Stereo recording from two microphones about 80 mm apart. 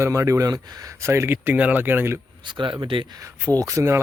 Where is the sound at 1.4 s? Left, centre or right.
Centre.